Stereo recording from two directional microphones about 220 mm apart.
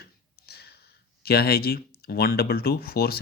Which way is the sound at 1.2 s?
45° left (ahead or behind).